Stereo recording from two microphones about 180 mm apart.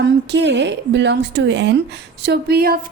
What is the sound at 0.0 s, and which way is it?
A woman's voice, 70° right (ahead or behind).